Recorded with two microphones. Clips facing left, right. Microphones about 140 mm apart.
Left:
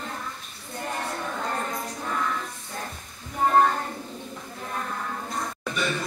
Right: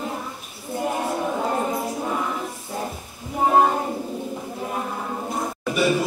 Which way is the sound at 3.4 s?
15° right (ahead or behind).